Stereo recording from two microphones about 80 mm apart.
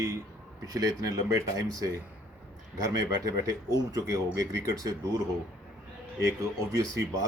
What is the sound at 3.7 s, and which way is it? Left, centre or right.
A man's voice, right.